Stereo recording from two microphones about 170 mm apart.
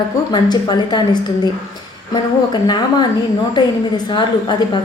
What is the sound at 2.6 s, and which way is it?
Speech, 25° left (ahead or behind).